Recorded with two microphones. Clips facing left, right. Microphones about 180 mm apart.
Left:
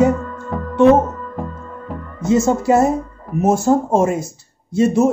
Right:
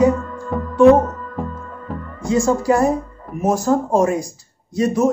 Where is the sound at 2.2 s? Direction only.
20° left (ahead or behind).